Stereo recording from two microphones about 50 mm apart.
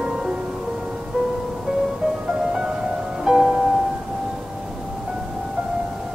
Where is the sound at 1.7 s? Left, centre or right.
Centre.